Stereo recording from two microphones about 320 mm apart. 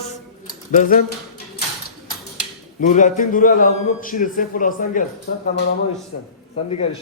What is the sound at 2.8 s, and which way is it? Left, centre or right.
A man's voice, left.